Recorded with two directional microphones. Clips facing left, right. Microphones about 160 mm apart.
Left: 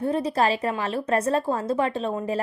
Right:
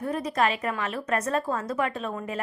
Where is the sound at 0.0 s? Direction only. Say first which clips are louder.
Left 3 dB; 30° left (ahead or behind).